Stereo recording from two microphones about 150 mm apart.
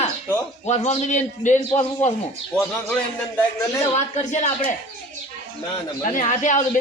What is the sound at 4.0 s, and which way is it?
Speech, 50° left (ahead or behind).